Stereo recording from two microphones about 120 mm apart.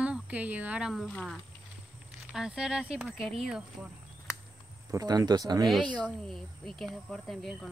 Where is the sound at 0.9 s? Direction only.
5° left (ahead or behind).